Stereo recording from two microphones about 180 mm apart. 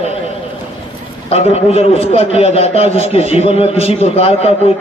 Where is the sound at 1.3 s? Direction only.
35° left (ahead or behind).